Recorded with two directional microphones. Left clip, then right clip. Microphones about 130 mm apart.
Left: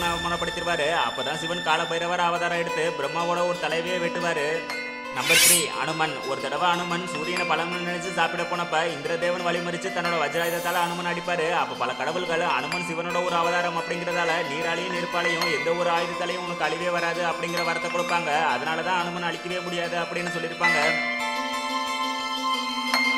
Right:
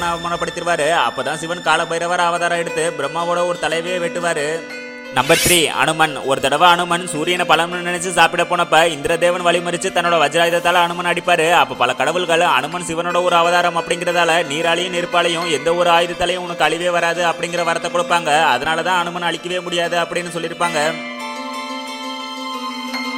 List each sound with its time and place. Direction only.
0.0 s music: 40° right (ahead or behind)
5.3 s speech: centre (ahead or behind)
5.6 s speech: 65° right (ahead or behind)
15.6 s music: 50° right (ahead or behind)